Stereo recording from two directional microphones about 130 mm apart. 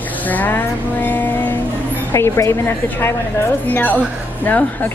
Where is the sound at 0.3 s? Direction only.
15° left (ahead or behind).